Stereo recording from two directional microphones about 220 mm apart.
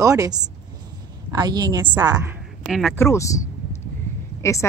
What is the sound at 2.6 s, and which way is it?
Speech, centre (ahead or behind).